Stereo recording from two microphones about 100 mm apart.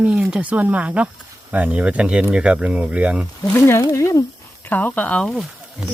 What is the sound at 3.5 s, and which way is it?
Speech, 25° left (ahead or behind).